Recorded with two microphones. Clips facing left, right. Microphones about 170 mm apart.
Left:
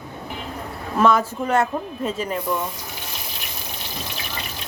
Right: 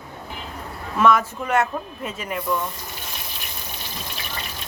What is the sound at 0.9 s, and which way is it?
Speech, 30° left (ahead or behind).